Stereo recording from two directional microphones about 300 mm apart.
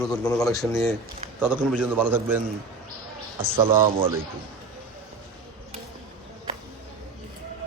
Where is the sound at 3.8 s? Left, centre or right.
Centre.